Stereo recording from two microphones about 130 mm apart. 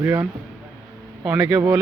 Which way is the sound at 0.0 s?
20° right (ahead or behind).